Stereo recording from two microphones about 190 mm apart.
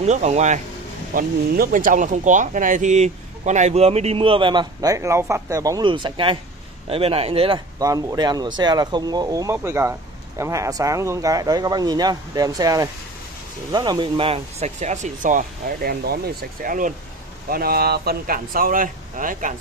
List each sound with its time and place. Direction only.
0.0 s speech: 35° right (ahead or behind)
1.1 s speech: 50° right (ahead or behind)